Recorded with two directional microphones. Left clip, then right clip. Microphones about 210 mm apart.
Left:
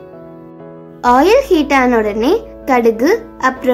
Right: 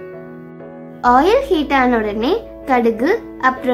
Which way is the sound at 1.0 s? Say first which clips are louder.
Left 3 dB; 5° left (ahead or behind).